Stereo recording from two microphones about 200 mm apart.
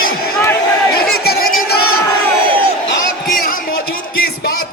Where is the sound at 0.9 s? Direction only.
50° left (ahead or behind).